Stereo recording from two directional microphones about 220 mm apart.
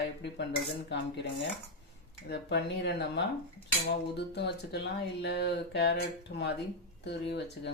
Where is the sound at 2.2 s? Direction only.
50° left (ahead or behind).